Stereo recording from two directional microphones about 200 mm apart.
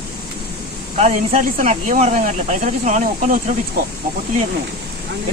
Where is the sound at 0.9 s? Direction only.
35° right (ahead or behind).